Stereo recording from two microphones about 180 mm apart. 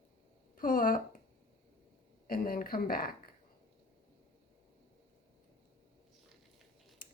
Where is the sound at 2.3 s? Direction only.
55° left (ahead or behind).